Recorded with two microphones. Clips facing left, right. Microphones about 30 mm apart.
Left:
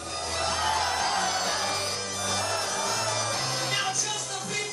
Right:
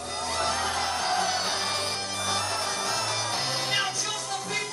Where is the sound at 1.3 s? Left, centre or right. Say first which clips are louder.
Even; right.